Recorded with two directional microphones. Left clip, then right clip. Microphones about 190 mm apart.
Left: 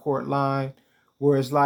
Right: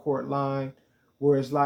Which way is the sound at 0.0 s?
40° left (ahead or behind).